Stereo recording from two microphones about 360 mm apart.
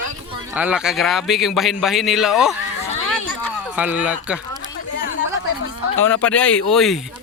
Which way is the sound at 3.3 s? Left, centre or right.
Centre.